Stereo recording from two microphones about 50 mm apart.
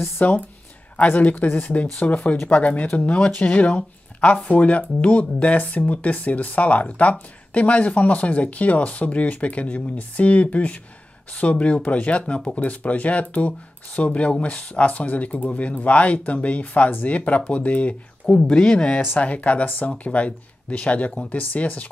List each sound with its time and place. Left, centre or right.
0.2 s speech: left